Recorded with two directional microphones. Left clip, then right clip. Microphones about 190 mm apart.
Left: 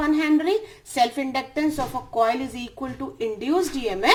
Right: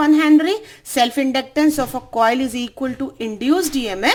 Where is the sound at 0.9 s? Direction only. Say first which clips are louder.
Right 5 dB; 55° right (ahead or behind).